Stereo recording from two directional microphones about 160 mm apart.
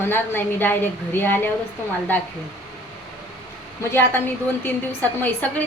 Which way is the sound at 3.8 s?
15° left (ahead or behind).